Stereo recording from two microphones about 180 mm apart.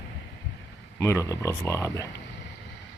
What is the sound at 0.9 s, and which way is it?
Speech, 15° left (ahead or behind).